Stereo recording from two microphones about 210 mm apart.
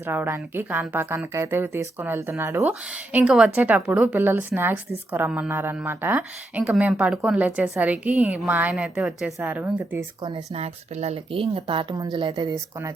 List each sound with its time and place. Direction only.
0.0 s a woman's voice: 10° right (ahead or behind)
10.2 s speech: 25° right (ahead or behind)